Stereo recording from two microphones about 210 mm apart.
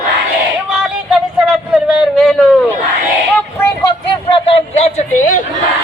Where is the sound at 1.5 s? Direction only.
Centre (ahead or behind).